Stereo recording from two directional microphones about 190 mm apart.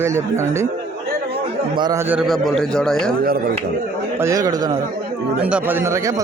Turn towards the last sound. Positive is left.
turn(degrees=-15)  # may be behind; listen again after turning